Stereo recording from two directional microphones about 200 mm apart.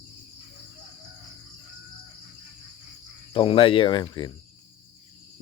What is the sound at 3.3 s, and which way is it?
Speech, 25° left (ahead or behind).